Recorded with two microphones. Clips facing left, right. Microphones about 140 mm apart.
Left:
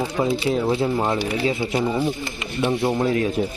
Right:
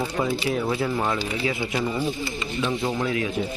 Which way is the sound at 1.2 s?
65° left (ahead or behind).